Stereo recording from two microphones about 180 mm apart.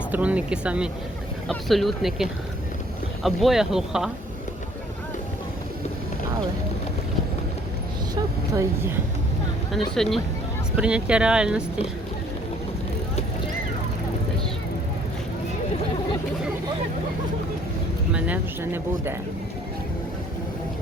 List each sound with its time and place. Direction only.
0.1 s speech: 5° right (ahead or behind)
8.1 s vehicle: 15° right (ahead or behind)
9.7 s speech: centre (ahead or behind)
18.1 s speech: 10° right (ahead or behind)